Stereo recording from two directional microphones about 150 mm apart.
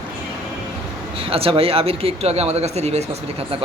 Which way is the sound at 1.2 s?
40° right (ahead or behind).